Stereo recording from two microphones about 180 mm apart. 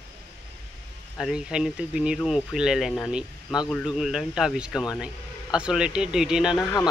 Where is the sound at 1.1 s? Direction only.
5° right (ahead or behind).